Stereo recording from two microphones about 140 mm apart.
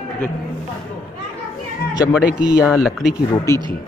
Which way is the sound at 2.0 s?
10° right (ahead or behind).